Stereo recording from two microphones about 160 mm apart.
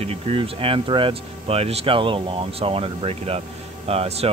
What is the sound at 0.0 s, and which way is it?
Speech, 35° right (ahead or behind).